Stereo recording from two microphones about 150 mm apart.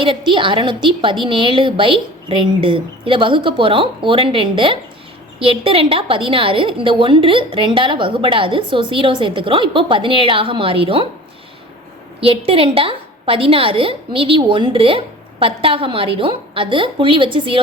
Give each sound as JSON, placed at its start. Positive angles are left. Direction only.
{"t": 0.0, "sound": "a woman's voice", "side_deg": -35}
{"t": 12.2, "sound": "a woman's voice", "side_deg": -35}